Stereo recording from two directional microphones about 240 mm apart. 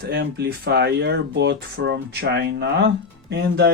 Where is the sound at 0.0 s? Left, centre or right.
Right.